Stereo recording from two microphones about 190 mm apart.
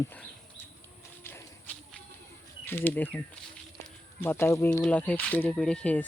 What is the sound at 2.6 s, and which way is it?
Speech, 10° left (ahead or behind).